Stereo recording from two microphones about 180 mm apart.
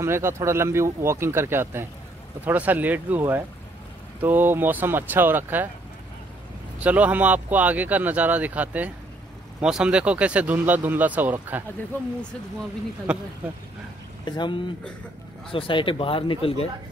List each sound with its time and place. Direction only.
0.0 s speech: 15° right (ahead or behind)
6.8 s speech: 10° right (ahead or behind)
13.1 s speech: 5° right (ahead or behind)
14.2 s speech: 25° left (ahead or behind)